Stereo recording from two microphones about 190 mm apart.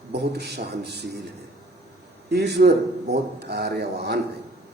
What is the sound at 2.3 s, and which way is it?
A man's voice, 60° right (ahead or behind).